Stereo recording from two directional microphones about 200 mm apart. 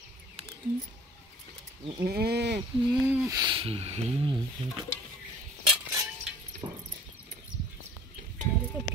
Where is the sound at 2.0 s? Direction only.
50° right (ahead or behind).